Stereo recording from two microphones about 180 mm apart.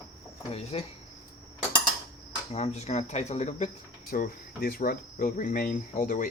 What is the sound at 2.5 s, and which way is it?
Speech, 35° left (ahead or behind).